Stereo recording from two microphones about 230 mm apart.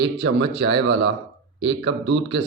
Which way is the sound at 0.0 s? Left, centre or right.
Right.